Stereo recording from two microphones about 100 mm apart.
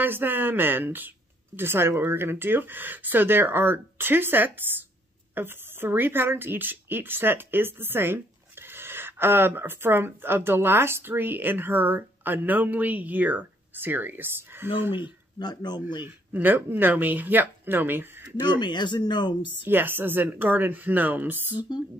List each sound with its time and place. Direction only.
0.0 s speech: 20° right (ahead or behind)
15.3 s speech: 45° left (ahead or behind)
16.0 s speech: 20° right (ahead or behind)
18.4 s speech: 50° left (ahead or behind)
19.6 s speech: 20° right (ahead or behind)